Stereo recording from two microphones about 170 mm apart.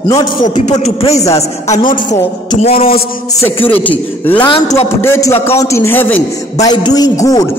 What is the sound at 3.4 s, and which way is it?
Speech, 30° left (ahead or behind).